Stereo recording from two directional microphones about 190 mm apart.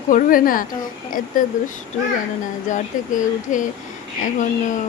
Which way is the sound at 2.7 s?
40° left (ahead or behind).